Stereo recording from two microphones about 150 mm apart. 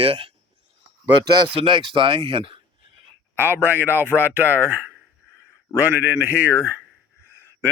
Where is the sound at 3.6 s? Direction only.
15° right (ahead or behind).